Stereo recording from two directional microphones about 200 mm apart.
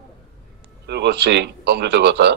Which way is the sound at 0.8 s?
55° right (ahead or behind).